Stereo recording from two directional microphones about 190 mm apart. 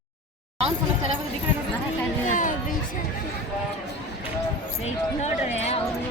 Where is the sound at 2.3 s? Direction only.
45° left (ahead or behind).